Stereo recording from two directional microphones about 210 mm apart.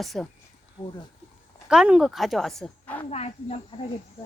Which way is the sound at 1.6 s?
5° right (ahead or behind).